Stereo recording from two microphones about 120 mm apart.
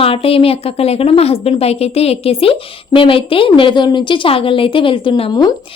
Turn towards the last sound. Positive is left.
turn(degrees=35)  # may be behind; listen again after turning